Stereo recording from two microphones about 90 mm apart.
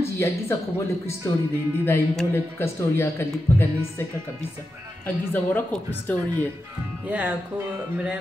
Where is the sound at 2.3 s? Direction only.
30° left (ahead or behind).